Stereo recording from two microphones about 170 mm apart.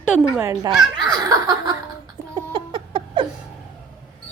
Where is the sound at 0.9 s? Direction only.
25° right (ahead or behind).